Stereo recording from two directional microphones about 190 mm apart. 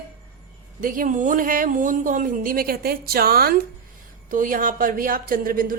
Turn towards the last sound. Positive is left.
turn(degrees=-50)  # may be behind; listen again after turning